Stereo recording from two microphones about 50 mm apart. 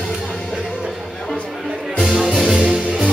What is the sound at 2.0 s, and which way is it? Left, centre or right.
Music, centre.